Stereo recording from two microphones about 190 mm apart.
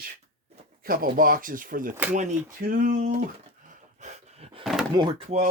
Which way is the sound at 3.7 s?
40° right (ahead or behind).